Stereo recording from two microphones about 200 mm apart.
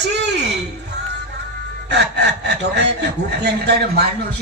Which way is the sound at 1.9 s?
60° right (ahead or behind).